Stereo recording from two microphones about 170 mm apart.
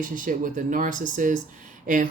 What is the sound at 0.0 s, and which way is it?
Speech, 50° right (ahead or behind).